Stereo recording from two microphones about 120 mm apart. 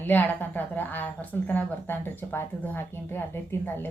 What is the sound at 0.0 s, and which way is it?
A woman's voice, 15° left (ahead or behind).